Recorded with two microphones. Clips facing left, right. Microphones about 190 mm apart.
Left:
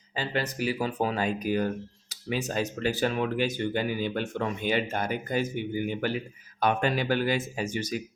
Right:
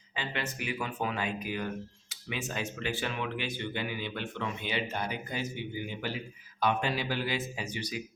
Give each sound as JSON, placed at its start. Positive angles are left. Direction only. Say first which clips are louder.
{"t": 0.2, "sound": "speech", "louder": "left 7 dB", "side_deg": 35}